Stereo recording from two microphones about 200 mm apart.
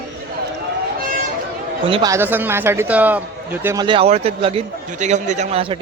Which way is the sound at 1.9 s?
25° right (ahead or behind).